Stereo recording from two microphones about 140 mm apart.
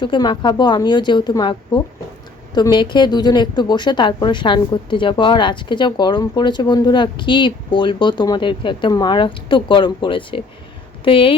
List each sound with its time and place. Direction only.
0.0 s a woman's voice: 35° left (ahead or behind)